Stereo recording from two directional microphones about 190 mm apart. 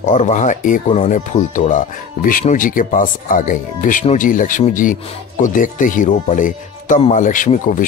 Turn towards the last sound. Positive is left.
turn(degrees=45)  # may be behind; listen again after turning